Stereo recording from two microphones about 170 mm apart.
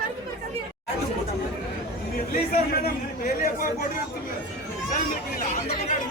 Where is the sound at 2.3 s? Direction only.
60° left (ahead or behind).